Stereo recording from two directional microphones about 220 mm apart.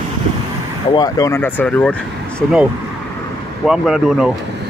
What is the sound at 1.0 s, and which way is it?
Speech, 15° left (ahead or behind).